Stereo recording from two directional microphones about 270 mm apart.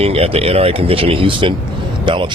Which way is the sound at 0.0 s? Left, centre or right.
Right.